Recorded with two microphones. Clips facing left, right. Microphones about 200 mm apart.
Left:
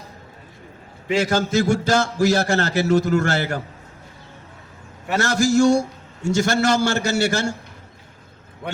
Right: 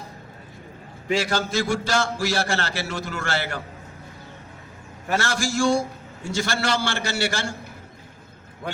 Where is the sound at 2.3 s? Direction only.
40° left (ahead or behind).